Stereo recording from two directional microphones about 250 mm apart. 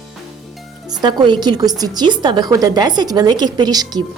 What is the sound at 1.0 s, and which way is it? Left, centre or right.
A woman's voice, centre.